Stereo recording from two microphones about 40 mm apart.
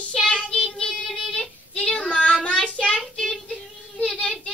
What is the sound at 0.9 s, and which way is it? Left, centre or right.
Child singing, centre.